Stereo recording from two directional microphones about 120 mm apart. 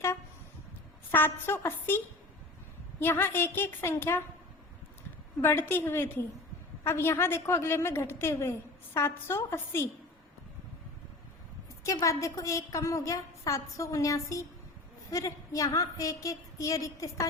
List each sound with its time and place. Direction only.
1.1 s a woman's voice: 15° left (ahead or behind)
3.0 s a woman's voice: 20° left (ahead or behind)
5.4 s a woman's voice: 20° left (ahead or behind)
11.9 s a woman's voice: 25° left (ahead or behind)